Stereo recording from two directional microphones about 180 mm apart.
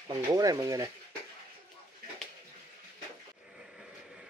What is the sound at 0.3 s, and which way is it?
Speech, 20° right (ahead or behind).